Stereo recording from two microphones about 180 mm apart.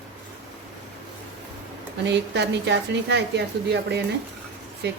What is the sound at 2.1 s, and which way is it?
A woman's voice, 75° right (ahead or behind).